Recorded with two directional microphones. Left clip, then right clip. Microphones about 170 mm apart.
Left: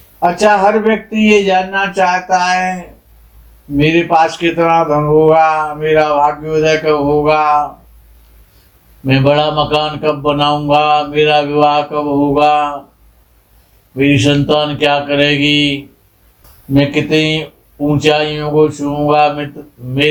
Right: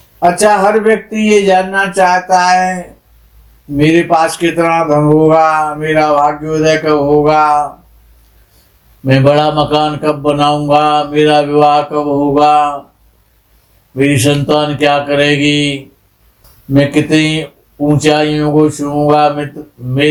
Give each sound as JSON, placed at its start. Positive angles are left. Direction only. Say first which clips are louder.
{"t": 0.2, "sound": "speech", "louder": "right 1 dB", "side_deg": -45}
{"t": 9.0, "sound": "speech", "louder": "right 2 dB", "side_deg": -45}
{"t": 13.9, "sound": "speech", "louder": "even", "side_deg": -40}